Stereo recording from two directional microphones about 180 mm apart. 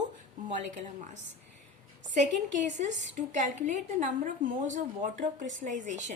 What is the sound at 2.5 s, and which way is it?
A woman's voice, 40° right (ahead or behind).